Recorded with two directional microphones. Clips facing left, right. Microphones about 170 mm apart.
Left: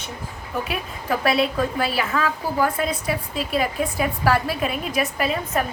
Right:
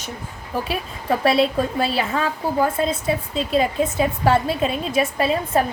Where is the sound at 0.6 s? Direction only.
30° right (ahead or behind).